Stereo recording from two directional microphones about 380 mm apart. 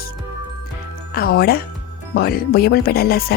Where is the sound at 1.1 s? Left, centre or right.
Left.